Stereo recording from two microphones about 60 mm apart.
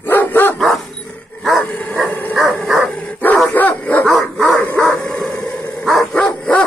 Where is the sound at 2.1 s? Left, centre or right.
Left.